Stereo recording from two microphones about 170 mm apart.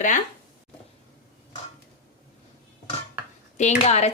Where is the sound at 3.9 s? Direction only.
40° left (ahead or behind).